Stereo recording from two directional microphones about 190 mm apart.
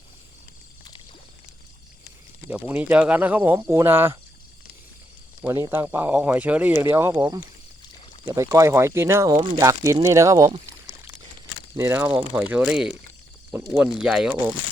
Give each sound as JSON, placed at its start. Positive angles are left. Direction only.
{"t": 2.5, "sound": "speech", "side_deg": -10}
{"t": 5.4, "sound": "speech", "side_deg": -15}
{"t": 11.8, "sound": "speech", "side_deg": -10}